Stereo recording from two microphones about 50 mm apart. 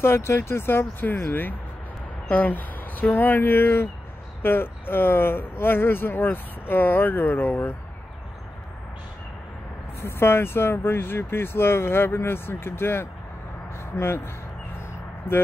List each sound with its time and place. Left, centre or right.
0.0 s speech: left
10.0 s speech: left
13.7 s speech: left